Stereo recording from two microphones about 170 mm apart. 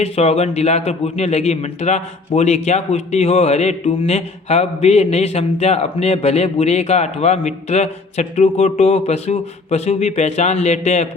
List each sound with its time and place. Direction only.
0.0 s a man's voice: 40° left (ahead or behind)